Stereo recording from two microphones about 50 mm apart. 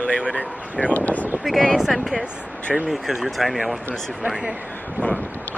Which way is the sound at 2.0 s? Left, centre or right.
Centre.